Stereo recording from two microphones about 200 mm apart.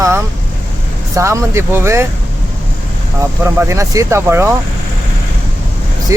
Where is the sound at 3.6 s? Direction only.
15° right (ahead or behind).